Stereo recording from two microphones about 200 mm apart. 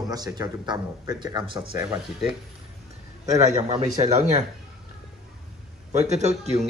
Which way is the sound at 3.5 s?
35° right (ahead or behind).